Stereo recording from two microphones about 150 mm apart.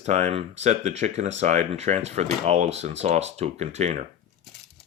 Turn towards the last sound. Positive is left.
turn(degrees=-50)  # may be behind; listen again after turning